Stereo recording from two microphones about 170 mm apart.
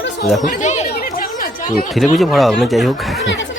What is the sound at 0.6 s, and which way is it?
Chatter, 45° left (ahead or behind).